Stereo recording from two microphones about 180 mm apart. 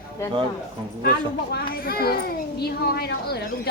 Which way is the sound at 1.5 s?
60° left (ahead or behind).